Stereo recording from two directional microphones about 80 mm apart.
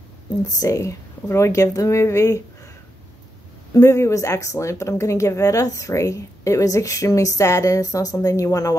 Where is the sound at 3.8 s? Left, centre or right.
Left.